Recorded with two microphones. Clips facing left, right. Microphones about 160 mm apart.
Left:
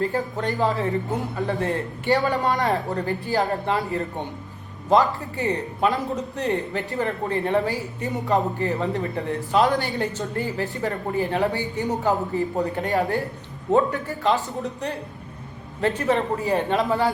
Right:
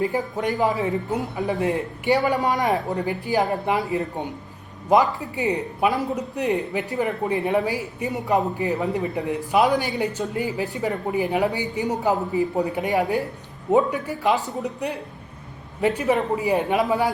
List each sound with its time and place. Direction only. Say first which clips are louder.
0.0 s a man's voice: right 1 dB; 15° right (ahead or behind)